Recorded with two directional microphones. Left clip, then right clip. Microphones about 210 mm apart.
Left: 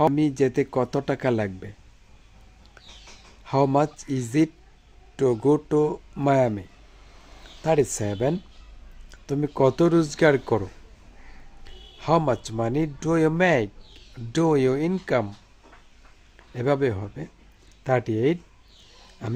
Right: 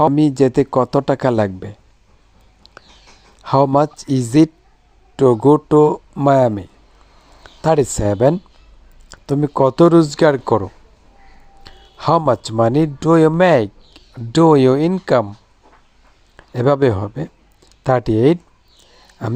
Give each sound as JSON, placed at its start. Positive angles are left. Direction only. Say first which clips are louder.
{"t": 0.0, "sound": "speech", "louder": "right 8 dB", "side_deg": -25}
{"t": 3.4, "sound": "speech", "louder": "right 8 dB", "side_deg": -30}
{"t": 11.6, "sound": "speech", "louder": "right 11 dB", "side_deg": -30}
{"t": 16.5, "sound": "speech", "louder": "right 9 dB", "side_deg": -30}